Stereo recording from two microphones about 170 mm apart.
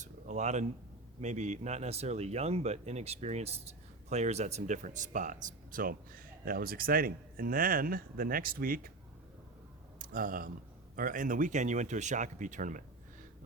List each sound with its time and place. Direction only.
0.0 s a sound: 45° right (ahead or behind)
1.2 s speech: 45° right (ahead or behind)
10.0 s speech: 55° right (ahead or behind)